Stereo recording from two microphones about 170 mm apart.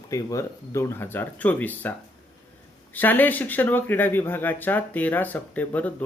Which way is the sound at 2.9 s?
10° left (ahead or behind).